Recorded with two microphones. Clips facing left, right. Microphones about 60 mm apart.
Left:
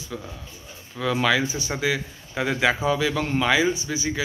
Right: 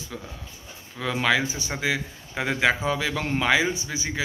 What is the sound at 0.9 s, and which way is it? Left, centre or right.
A man's voice, right.